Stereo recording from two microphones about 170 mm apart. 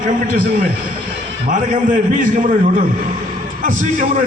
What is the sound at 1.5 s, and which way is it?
A man's voice, 50° right (ahead or behind).